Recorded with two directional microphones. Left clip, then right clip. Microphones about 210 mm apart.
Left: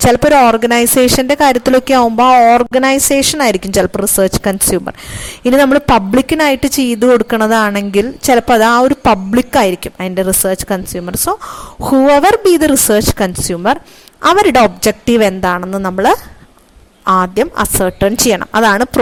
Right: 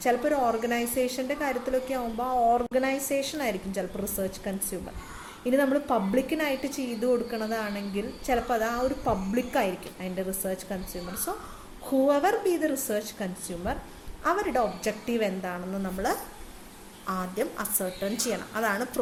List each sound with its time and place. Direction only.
0.0 s a woman's voice: 45° left (ahead or behind)